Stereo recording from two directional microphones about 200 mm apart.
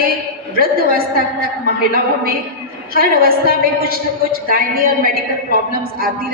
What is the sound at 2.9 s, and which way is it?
A woman's voice, 50° right (ahead or behind).